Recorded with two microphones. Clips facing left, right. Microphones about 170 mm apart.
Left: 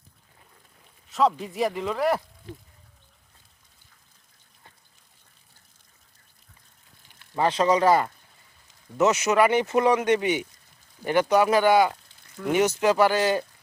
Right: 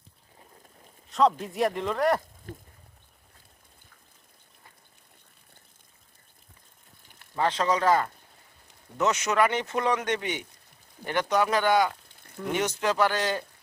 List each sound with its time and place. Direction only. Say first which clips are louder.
1.1 s speech: even; centre (ahead or behind)
2.5 s speech: left 1 dB; 50° right (ahead or behind)
7.3 s speech: left 4 dB; 10° left (ahead or behind)